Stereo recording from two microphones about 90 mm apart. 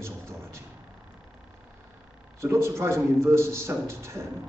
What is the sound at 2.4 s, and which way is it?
A man's voice, 30° right (ahead or behind).